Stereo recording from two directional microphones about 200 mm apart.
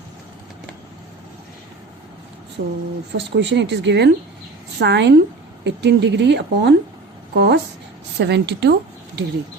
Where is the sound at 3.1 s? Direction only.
60° right (ahead or behind).